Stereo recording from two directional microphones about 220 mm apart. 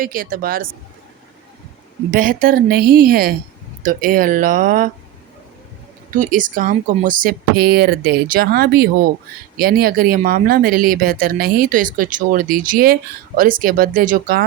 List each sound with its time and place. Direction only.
0.0 s speech: 40° right (ahead or behind)
2.0 s speech: 40° right (ahead or behind)
6.1 s speech: 35° right (ahead or behind)